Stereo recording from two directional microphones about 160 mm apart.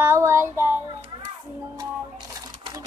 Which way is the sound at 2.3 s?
25° right (ahead or behind).